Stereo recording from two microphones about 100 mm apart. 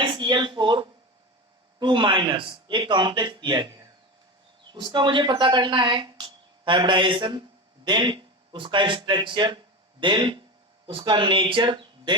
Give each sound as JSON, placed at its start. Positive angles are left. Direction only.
{"t": 0.0, "sound": "a woman's voice", "side_deg": -55}
{"t": 4.7, "sound": "speech", "side_deg": -50}